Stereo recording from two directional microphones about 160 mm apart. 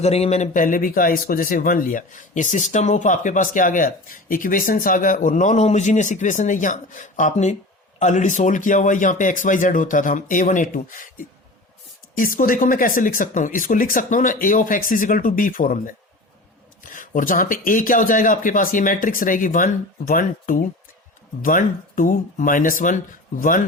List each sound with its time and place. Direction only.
0.0 s speech: 40° left (ahead or behind)